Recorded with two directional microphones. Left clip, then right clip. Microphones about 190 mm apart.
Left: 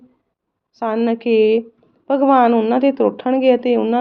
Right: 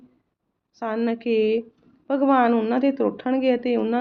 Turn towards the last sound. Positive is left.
turn(degrees=45)  # may be behind; listen again after turning